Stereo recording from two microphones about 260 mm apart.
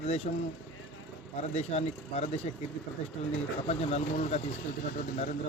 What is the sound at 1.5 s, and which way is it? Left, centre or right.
Speech, left.